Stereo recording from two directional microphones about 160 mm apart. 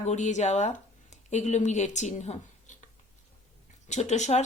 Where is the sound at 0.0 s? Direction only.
45° left (ahead or behind).